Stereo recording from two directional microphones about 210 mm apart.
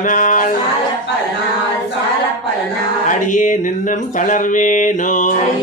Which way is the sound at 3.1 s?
40° left (ahead or behind).